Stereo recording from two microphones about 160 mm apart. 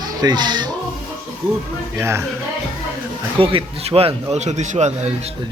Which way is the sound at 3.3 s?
35° right (ahead or behind).